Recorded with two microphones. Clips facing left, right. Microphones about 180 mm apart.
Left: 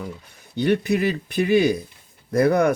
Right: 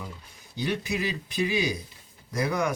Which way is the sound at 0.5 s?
60° left (ahead or behind).